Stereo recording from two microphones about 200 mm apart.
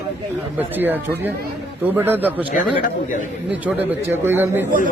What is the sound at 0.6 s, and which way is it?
Speech, 10° right (ahead or behind).